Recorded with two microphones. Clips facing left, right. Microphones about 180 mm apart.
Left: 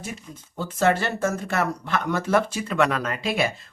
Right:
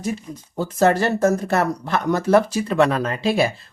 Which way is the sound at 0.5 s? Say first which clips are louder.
Right 4 dB; 40° right (ahead or behind).